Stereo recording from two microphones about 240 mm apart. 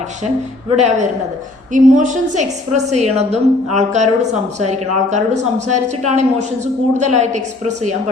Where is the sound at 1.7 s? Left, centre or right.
Right.